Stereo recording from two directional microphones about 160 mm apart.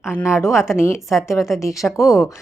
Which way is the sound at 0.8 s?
15° left (ahead or behind).